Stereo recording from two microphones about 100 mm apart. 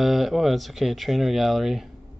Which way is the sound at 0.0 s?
Centre (ahead or behind).